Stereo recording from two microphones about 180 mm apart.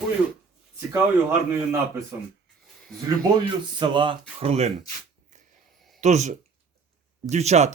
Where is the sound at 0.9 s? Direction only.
10° right (ahead or behind).